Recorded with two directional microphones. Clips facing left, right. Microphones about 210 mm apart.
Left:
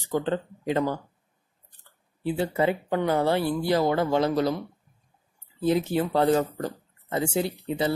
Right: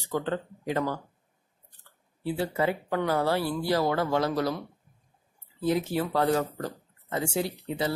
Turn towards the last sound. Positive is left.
turn(degrees=25)  # may be behind; listen again after turning